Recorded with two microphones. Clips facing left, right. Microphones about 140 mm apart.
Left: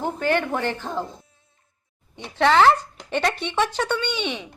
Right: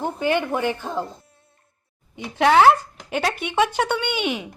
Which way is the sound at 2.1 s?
10° right (ahead or behind).